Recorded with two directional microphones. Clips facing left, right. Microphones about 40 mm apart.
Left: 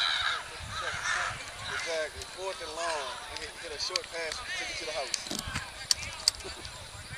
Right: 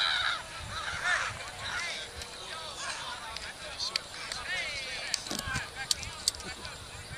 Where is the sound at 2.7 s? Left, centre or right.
Centre.